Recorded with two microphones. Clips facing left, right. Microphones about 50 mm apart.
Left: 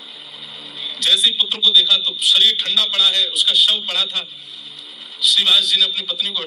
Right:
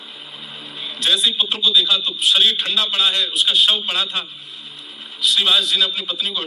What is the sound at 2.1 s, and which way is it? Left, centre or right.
Speech, right.